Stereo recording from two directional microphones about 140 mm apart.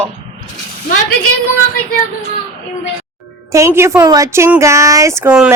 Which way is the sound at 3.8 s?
20° right (ahead or behind).